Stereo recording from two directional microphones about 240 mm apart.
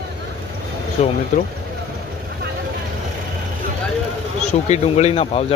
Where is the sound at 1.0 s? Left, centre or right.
Left.